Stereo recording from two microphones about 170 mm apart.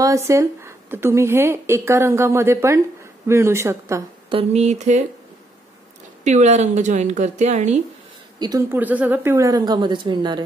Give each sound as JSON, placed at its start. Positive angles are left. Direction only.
{"t": 0.0, "sound": "a woman's voice", "side_deg": -20}
{"t": 4.3, "sound": "a sound", "side_deg": -35}
{"t": 6.2, "sound": "speech", "side_deg": -40}
{"t": 8.4, "sound": "a woman's voice", "side_deg": -20}